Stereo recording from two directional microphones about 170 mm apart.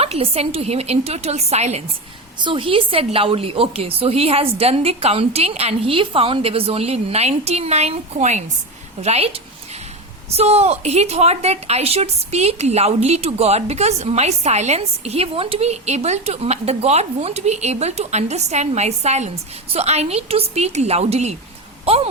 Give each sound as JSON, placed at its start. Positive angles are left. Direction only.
{"t": 0.0, "sound": "a woman's voice", "side_deg": -35}